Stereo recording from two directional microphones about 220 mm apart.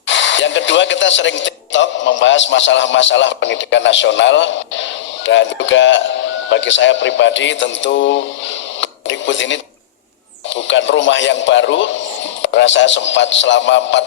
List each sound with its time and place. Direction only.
0.1 s speech: 55° left (ahead or behind)
8.8 s radio: 55° left (ahead or behind)
10.5 s speech: 55° left (ahead or behind)